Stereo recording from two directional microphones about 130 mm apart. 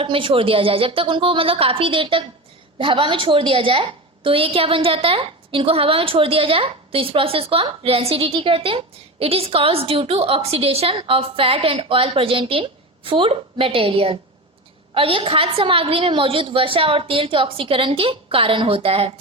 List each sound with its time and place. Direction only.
0.0 s a woman's voice: 40° right (ahead or behind)